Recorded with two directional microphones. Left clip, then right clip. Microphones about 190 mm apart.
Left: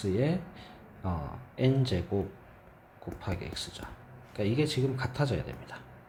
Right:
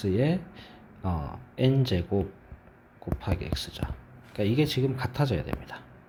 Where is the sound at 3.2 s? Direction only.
30° right (ahead or behind).